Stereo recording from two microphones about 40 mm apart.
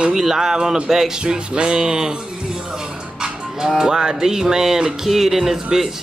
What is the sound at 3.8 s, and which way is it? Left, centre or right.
Speech, centre.